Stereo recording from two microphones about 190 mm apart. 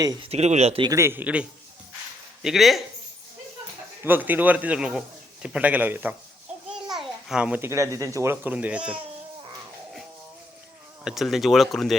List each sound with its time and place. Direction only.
0.0 s speech: 20° right (ahead or behind)
0.3 s speech: 35° right (ahead or behind)
0.9 s a man's voice: 15° right (ahead or behind)
4.0 s a man's voice: 10° right (ahead or behind)
11.0 s speech: centre (ahead or behind)